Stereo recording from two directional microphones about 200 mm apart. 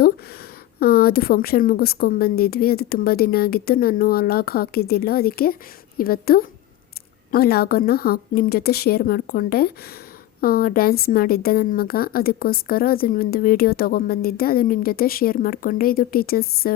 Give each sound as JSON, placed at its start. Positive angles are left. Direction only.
{"t": 0.8, "sound": "a woman's voice", "side_deg": 50}